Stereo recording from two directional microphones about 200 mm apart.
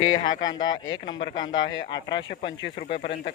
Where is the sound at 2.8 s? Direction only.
50° left (ahead or behind).